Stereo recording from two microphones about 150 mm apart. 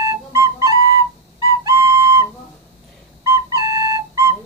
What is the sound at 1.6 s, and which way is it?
Whistle, 20° right (ahead or behind).